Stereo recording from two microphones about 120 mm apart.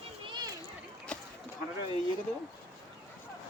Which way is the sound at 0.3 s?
40° right (ahead or behind).